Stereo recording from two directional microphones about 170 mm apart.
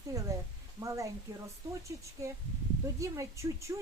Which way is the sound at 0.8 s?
20° right (ahead or behind).